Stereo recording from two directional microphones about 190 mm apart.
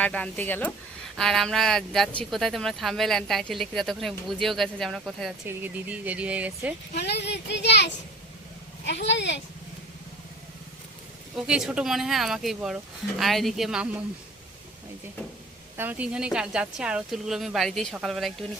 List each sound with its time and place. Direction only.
0.0 s speech: 5° left (ahead or behind)
6.9 s speech: 60° left (ahead or behind)
11.3 s speech: 5° right (ahead or behind)
15.8 s speech: 10° right (ahead or behind)